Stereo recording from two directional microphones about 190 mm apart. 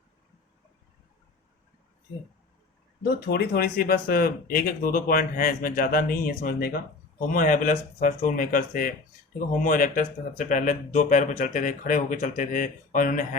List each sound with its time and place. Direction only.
3.0 s speech: 55° left (ahead or behind)